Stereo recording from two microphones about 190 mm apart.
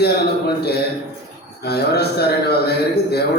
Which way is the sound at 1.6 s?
60° left (ahead or behind).